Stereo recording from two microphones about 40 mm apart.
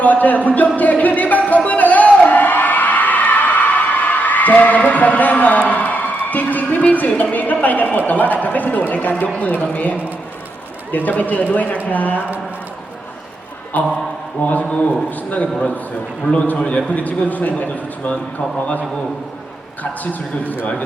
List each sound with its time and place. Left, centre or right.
0.0 s a man's voice: left
0.8 s a sound: left
7.3 s a man's voice: left
10.9 s a man's voice: left
13.7 s a man's voice: left
16.6 s a man's voice: left